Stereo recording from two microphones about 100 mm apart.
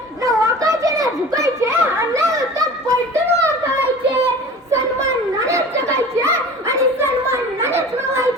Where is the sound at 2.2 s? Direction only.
30° right (ahead or behind).